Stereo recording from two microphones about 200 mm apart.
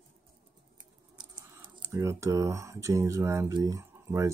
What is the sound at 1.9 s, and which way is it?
Speech, 15° right (ahead or behind).